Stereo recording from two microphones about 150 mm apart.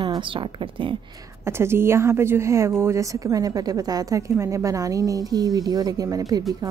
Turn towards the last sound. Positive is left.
turn(degrees=-25)  # may be behind; listen again after turning